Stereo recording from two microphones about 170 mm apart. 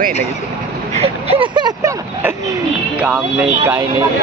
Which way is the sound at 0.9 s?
35° right (ahead or behind).